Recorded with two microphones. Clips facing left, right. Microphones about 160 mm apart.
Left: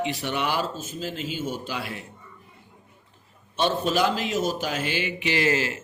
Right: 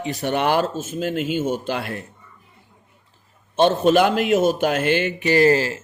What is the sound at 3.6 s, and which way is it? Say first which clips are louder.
Mantra: right 8 dB; 50° right (ahead or behind).